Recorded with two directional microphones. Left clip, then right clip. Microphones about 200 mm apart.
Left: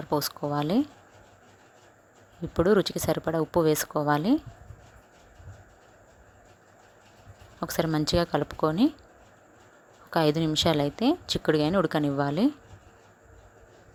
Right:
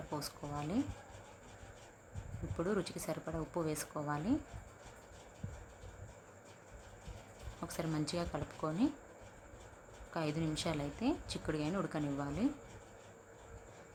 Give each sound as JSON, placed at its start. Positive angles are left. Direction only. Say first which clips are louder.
{"t": 0.1, "sound": "speech", "louder": "left 16 dB", "side_deg": 40}
{"t": 2.6, "sound": "speech", "louder": "left 15 dB", "side_deg": 40}
{"t": 7.6, "sound": "speech", "louder": "left 13 dB", "side_deg": 40}
{"t": 10.1, "sound": "speech", "louder": "left 15 dB", "side_deg": 40}